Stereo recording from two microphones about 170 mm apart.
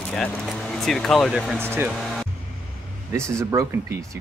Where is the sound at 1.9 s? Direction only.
Centre (ahead or behind).